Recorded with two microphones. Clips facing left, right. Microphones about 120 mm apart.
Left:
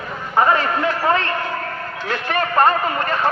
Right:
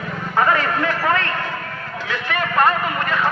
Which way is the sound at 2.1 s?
40° left (ahead or behind).